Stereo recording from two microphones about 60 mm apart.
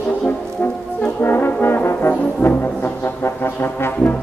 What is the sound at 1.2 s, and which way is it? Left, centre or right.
Brass instrument, left.